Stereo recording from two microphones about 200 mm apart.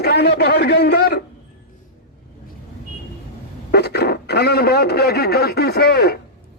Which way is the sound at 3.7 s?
55° left (ahead or behind).